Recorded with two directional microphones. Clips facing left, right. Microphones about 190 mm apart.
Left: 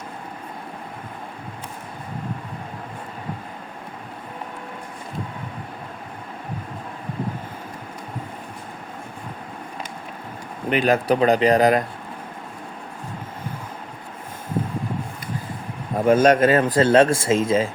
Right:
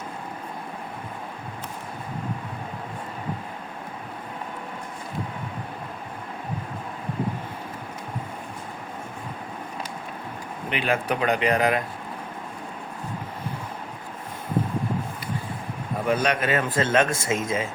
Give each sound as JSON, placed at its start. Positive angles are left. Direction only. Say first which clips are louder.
{"t": 10.7, "sound": "speech", "louder": "left 7 dB", "side_deg": 40}
{"t": 16.0, "sound": "speech", "louder": "left 9 dB", "side_deg": 40}